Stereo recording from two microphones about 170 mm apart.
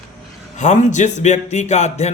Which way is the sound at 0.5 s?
45° left (ahead or behind).